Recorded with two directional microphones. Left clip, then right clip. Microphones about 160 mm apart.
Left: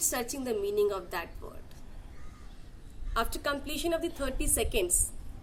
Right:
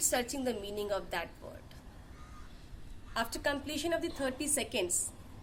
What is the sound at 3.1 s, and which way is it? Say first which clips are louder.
A woman's voice: left 2 dB; 10° right (ahead or behind).